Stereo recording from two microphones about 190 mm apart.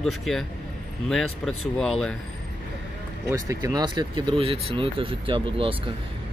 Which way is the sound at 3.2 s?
15° right (ahead or behind).